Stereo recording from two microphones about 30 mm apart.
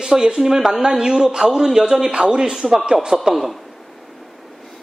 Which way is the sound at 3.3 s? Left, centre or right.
Centre.